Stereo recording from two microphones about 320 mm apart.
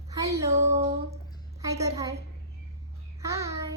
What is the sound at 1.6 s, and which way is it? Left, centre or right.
Speech, centre.